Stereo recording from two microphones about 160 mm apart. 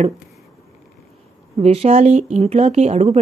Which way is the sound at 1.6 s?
40° right (ahead or behind).